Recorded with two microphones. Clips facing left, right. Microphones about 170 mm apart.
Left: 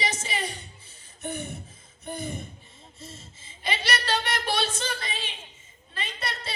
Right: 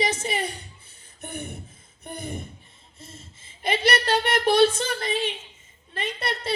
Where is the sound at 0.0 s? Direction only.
55° right (ahead or behind).